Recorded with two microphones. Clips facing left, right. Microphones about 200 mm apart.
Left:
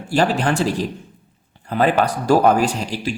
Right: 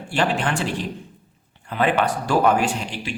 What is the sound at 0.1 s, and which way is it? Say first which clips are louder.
Speech: left 4 dB; 40° left (ahead or behind).